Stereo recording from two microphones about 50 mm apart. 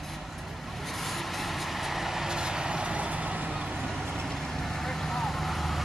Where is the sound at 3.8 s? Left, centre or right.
Centre.